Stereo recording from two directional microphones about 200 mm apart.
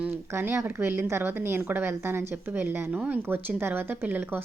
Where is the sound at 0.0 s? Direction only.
10° right (ahead or behind).